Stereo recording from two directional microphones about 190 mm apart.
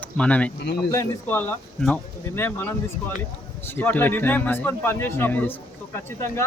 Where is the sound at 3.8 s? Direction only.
10° left (ahead or behind).